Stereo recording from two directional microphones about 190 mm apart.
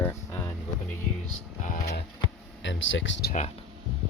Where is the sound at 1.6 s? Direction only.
50° left (ahead or behind).